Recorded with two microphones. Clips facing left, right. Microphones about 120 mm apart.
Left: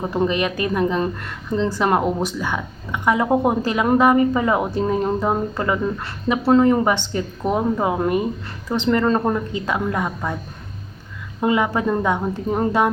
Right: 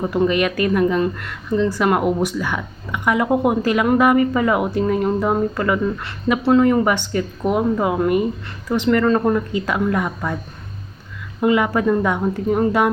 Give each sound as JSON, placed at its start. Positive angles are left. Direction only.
{"t": 0.1, "sound": "a woman's voice", "side_deg": 25}
{"t": 11.3, "sound": "a woman's voice", "side_deg": 25}